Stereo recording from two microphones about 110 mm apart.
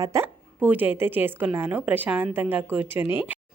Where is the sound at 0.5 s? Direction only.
15° right (ahead or behind).